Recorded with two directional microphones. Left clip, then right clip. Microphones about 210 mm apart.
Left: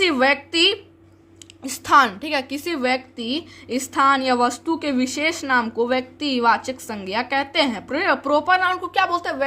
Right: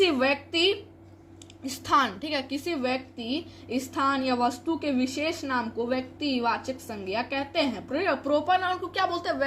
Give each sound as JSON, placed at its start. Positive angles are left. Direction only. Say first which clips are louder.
{"t": 0.0, "sound": "a woman's voice", "louder": "left 6 dB", "side_deg": 35}